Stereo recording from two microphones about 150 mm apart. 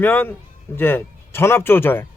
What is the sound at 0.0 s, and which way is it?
Speech, 15° left (ahead or behind).